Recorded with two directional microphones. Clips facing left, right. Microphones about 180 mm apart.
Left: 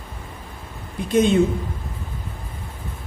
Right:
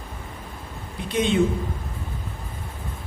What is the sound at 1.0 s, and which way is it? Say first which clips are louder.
Speech: left 7 dB; 45° left (ahead or behind).